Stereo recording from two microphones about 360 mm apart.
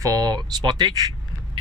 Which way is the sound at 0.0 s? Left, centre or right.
Centre.